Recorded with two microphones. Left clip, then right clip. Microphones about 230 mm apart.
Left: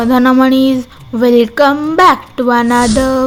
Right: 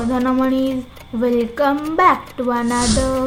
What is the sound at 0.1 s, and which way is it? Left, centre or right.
A woman's voice, left.